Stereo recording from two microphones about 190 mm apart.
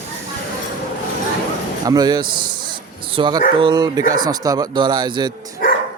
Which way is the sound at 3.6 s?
25° right (ahead or behind).